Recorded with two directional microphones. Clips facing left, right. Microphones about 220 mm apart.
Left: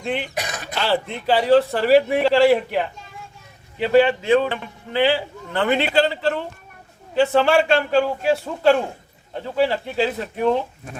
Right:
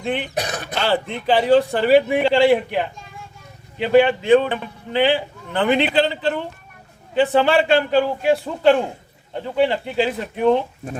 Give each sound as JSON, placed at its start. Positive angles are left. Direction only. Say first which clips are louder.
{"t": 0.0, "sound": "speech", "louder": "right 1 dB", "side_deg": 0}
{"t": 0.3, "sound": "throat clearing", "louder": "right 4 dB", "side_deg": -35}
{"t": 0.8, "sound": "speech", "louder": "right 1 dB", "side_deg": 0}
{"t": 9.3, "sound": "speech", "louder": "right 1 dB", "side_deg": 0}